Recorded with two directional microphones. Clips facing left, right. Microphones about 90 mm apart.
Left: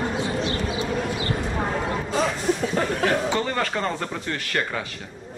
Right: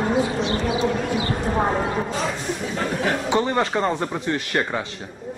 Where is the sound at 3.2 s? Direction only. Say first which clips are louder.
Right 4 dB; 20° right (ahead or behind).